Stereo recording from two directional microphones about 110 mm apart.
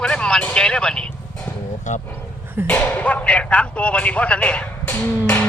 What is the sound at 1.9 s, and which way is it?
Speech, 90° left.